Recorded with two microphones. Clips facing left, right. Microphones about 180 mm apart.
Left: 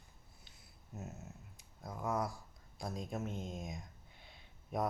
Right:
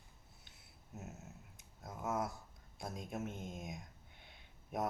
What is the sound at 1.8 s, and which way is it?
Speech, 5° right (ahead or behind).